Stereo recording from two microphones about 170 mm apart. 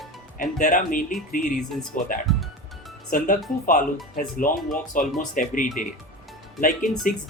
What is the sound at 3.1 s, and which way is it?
Speech, 55° left (ahead or behind).